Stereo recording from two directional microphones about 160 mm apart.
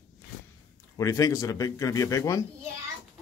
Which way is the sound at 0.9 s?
20° left (ahead or behind).